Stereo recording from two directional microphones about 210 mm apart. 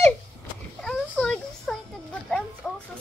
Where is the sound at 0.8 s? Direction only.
5° left (ahead or behind).